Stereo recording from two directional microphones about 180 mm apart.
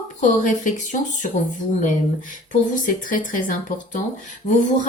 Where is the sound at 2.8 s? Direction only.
50° left (ahead or behind).